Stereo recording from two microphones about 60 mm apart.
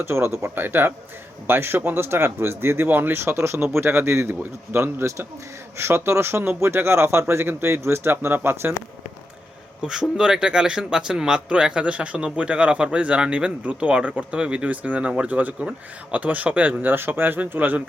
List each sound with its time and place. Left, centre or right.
0.0 s speech: right
3.3 s speech: right
9.8 s speech: centre; by 17.8 s right